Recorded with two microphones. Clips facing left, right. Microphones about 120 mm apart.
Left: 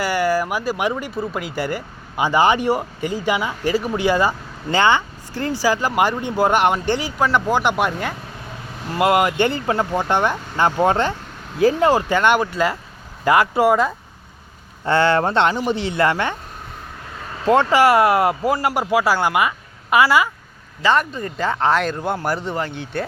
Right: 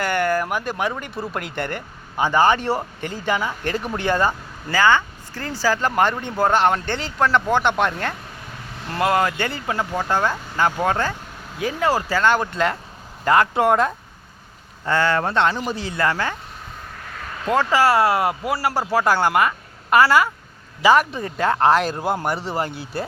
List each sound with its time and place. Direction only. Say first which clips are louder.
0.0 s speech: left 2 dB; 5° left (ahead or behind)
4.7 s speech: left 1 dB; 20° left (ahead or behind)
9.5 s speech: left 4 dB; 25° left (ahead or behind)
12.5 s speech: left 1 dB; 5° left (ahead or behind)
14.8 s speech: left 3 dB; 30° left (ahead or behind)
17.4 s speech: left 4 dB; 25° left (ahead or behind)
19.0 s speech: even; 5° left (ahead or behind)